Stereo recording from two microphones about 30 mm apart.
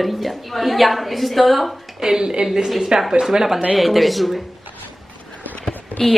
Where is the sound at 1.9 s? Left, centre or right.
Centre.